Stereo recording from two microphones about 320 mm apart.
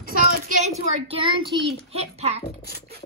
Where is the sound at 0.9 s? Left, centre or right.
Centre.